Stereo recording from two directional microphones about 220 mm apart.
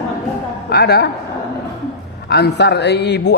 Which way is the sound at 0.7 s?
45° left (ahead or behind).